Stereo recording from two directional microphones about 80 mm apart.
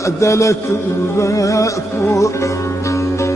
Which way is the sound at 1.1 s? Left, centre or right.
Left.